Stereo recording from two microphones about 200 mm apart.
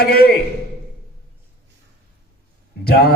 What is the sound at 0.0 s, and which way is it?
Speech, 50° left (ahead or behind).